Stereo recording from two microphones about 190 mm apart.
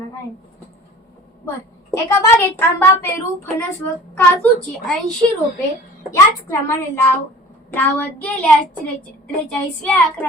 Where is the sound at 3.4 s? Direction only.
10° left (ahead or behind).